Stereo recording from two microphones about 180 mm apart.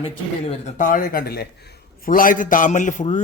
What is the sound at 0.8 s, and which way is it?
Speech, 45° left (ahead or behind).